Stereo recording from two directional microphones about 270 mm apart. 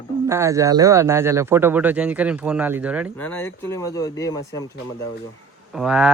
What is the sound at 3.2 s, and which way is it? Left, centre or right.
Speech, centre.